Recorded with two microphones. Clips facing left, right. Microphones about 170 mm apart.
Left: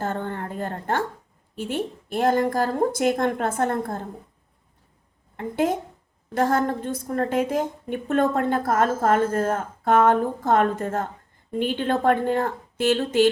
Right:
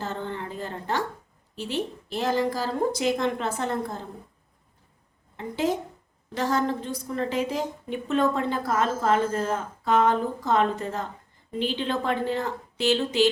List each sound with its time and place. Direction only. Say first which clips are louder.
0.0 s a sound: left 4 dB; 50° left (ahead or behind)
1.5 s a woman's voice: left 2 dB; 50° left (ahead or behind)
5.4 s a woman's voice: left 3 dB; 55° left (ahead or behind)